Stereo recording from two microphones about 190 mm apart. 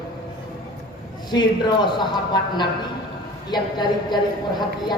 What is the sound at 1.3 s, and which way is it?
Speech, 25° left (ahead or behind).